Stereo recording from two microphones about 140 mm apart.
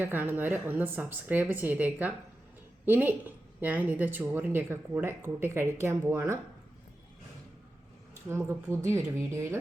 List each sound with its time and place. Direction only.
0.0 s speech: 15° right (ahead or behind)
8.3 s speech: 20° right (ahead or behind)